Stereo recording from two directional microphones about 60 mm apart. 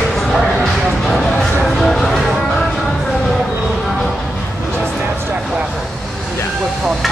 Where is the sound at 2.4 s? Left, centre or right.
Centre.